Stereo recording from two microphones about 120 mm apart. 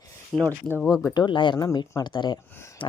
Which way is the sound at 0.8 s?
5° right (ahead or behind).